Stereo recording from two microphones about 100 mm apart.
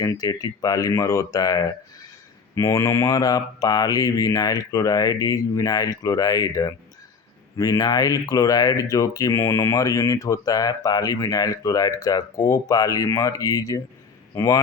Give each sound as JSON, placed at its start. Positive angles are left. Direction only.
{"t": 0.0, "sound": "speech", "side_deg": 40}